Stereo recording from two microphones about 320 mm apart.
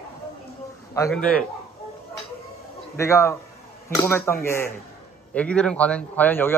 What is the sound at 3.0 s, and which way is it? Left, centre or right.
A man's voice, centre.